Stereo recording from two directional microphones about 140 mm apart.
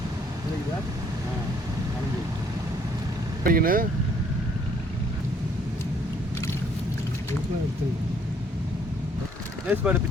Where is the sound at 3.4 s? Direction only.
90° right.